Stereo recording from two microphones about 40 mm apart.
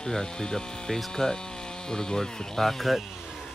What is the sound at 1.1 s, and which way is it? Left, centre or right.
Speech, centre.